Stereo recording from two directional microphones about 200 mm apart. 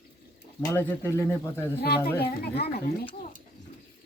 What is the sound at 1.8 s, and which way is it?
Speech, 50° left (ahead or behind).